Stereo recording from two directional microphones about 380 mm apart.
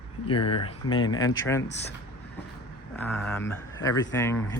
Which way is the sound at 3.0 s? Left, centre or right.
Centre.